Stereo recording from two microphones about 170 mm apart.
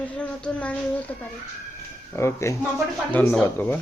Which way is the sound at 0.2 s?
5° left (ahead or behind).